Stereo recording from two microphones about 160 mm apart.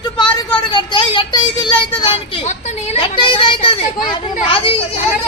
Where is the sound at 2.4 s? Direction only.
45° left (ahead or behind).